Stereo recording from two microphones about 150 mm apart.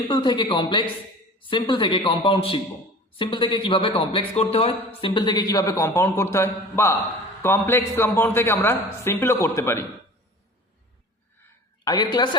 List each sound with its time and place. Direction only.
0.1 s a man's voice: 30° left (ahead or behind)
11.9 s a woman's voice: 30° left (ahead or behind)